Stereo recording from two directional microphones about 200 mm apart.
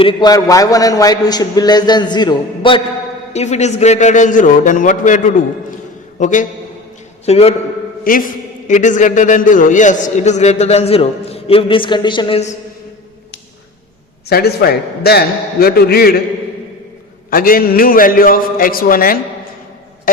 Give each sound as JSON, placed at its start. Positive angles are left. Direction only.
{"t": 0.0, "sound": "a man's voice", "side_deg": 25}
{"t": 3.3, "sound": "a man's voice", "side_deg": 35}
{"t": 8.0, "sound": "a man's voice", "side_deg": 45}
{"t": 14.3, "sound": "a man's voice", "side_deg": 50}
{"t": 17.3, "sound": "a man's voice", "side_deg": 45}